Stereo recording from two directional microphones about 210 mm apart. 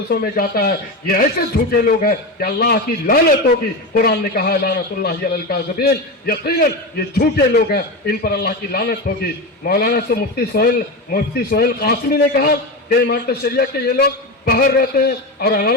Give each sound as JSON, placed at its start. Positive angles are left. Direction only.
{"t": 0.1, "sound": "a man's voice", "side_deg": 45}